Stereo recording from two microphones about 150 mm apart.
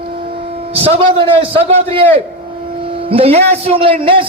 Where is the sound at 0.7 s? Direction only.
40° right (ahead or behind).